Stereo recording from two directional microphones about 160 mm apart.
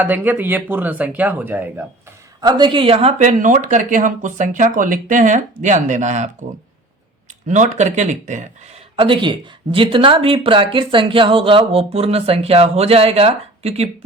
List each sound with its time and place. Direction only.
0.0 s speech: 10° right (ahead or behind)
2.4 s speech: 25° right (ahead or behind); by 6.3 s 50° right (ahead or behind)
7.4 s speech: 50° right (ahead or behind)